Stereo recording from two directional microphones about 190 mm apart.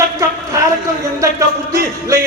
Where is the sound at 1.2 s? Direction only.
15° right (ahead or behind).